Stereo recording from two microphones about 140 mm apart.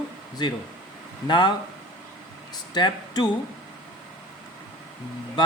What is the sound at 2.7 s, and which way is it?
Speech, 30° left (ahead or behind).